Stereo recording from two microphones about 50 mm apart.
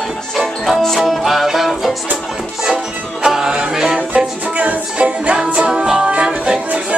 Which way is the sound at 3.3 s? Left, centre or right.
Centre.